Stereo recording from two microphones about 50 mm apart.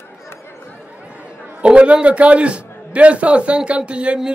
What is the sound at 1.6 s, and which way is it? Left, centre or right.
A man's voice, right.